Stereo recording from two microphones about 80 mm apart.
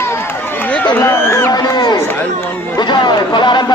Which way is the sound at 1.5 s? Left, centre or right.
Left.